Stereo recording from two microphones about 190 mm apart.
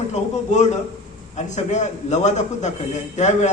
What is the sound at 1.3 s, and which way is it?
A man's voice, 40° left (ahead or behind).